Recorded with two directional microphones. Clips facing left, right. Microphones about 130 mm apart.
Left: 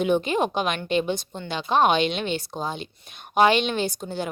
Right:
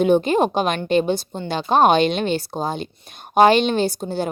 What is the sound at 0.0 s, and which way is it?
A woman's voice, 40° right (ahead or behind).